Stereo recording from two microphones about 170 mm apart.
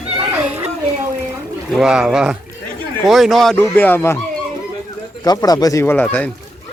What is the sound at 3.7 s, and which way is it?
Speech, 10° left (ahead or behind).